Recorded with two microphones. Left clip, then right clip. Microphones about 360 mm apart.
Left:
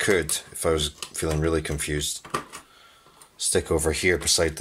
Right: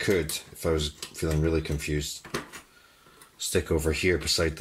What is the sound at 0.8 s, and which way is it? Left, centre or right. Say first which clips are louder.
Speech: left 3 dB; centre.